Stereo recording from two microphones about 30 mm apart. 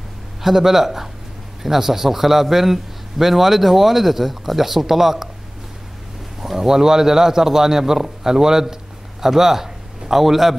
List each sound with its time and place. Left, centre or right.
0.4 s a man's voice: centre
6.4 s a man's voice: centre